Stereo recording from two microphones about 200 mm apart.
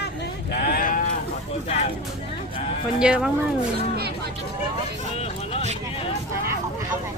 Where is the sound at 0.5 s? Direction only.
50° left (ahead or behind).